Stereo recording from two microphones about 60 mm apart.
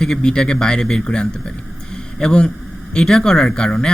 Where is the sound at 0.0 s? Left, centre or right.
Centre.